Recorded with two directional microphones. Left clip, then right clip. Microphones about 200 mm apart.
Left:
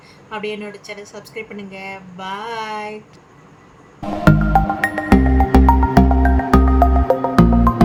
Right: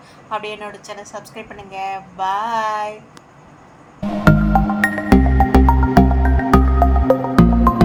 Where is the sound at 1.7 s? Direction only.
20° right (ahead or behind).